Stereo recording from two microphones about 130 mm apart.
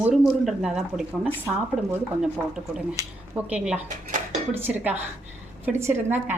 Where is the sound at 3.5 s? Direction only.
10° right (ahead or behind).